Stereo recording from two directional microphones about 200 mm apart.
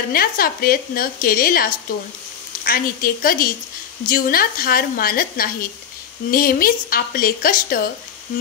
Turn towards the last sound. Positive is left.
turn(degrees=45)  # may be behind; listen again after turning